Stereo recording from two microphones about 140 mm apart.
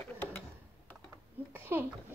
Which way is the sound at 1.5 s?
15° right (ahead or behind).